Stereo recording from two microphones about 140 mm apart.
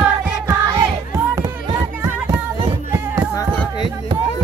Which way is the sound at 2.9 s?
20° right (ahead or behind).